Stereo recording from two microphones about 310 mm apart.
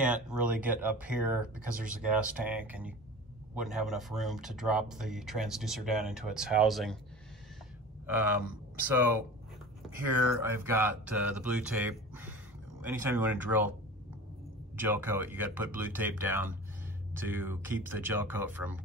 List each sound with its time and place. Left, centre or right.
0.0 s speech: centre
8.1 s speech: centre
14.8 s speech: centre